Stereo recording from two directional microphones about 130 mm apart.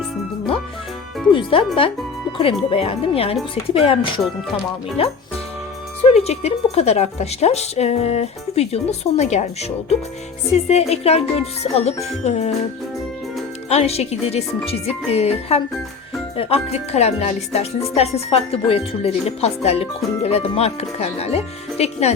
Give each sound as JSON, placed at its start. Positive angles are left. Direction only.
{"t": 1.3, "sound": "speech", "side_deg": 40}
{"t": 13.7, "sound": "speech", "side_deg": 55}